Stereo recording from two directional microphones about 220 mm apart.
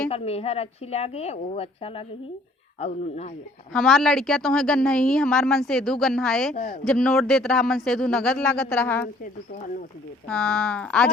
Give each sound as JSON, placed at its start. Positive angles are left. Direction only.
{"t": 0.1, "sound": "a woman's voice", "side_deg": 25}
{"t": 3.7, "sound": "a woman's voice", "side_deg": 0}
{"t": 6.5, "sound": "speech", "side_deg": 35}
{"t": 6.8, "sound": "a woman's voice", "side_deg": 0}
{"t": 10.2, "sound": "a woman's voice", "side_deg": 5}